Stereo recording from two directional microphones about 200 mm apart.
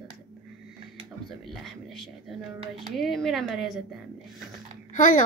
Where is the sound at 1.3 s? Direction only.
Centre (ahead or behind).